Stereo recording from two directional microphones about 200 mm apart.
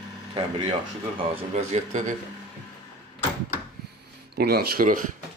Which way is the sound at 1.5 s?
35° right (ahead or behind).